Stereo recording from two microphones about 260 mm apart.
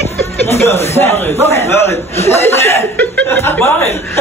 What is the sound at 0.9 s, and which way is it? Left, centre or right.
Speech, centre.